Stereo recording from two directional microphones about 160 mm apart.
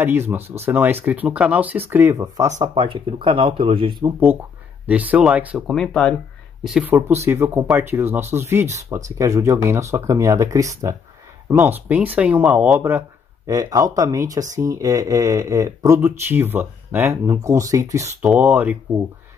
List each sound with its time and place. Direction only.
0.6 s speech: 10° right (ahead or behind)
2.7 s speech: 30° right (ahead or behind)
4.0 s speech: 15° right (ahead or behind)
5.8 s speech: 5° left (ahead or behind)
6.6 s speech: 5° right (ahead or behind)
13.5 s speech: 20° right (ahead or behind)
18.2 s speech: 10° right (ahead or behind)